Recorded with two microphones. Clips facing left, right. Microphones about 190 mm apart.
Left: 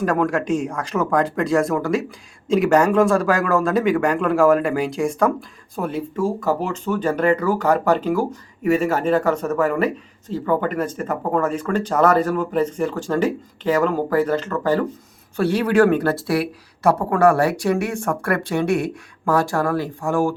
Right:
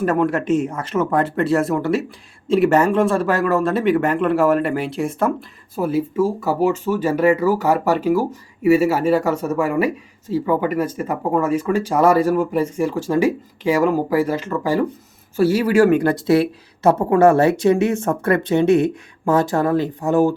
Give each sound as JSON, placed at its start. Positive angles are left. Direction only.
{"t": 0.0, "sound": "speech", "side_deg": -5}